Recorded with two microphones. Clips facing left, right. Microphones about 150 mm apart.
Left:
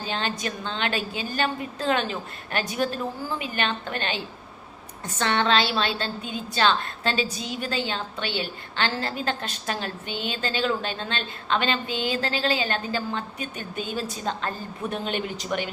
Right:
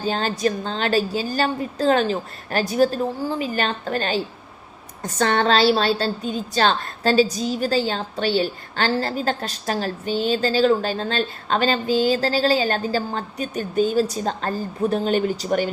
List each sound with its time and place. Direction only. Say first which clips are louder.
0.0 s a woman's voice: right 7 dB; 40° right (ahead or behind)